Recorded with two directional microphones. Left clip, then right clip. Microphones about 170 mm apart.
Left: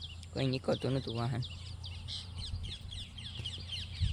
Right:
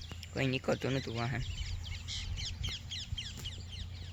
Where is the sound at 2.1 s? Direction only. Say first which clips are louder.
Right 2 dB; 40° left (ahead or behind).